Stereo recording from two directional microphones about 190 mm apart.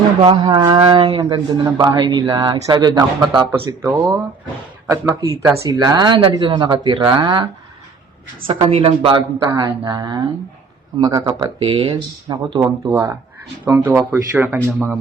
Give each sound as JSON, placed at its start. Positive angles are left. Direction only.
{"t": 0.2, "sound": "speech", "side_deg": -25}
{"t": 4.9, "sound": "speech", "side_deg": -15}
{"t": 8.4, "sound": "speech", "side_deg": -30}